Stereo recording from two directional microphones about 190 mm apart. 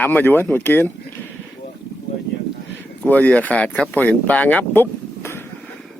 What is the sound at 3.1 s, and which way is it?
A man's voice, 10° left (ahead or behind).